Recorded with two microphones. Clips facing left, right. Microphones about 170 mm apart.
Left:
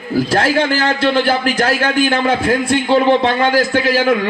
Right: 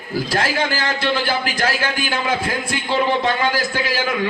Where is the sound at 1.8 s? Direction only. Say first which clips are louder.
Left 8 dB; 55° left (ahead or behind).